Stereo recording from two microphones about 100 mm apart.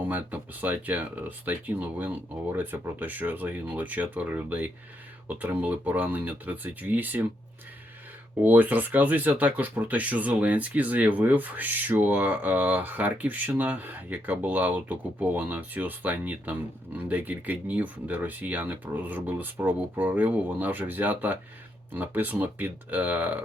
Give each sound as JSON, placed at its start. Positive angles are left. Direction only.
{"t": 0.0, "sound": "speech", "side_deg": -15}
{"t": 8.4, "sound": "speech", "side_deg": -20}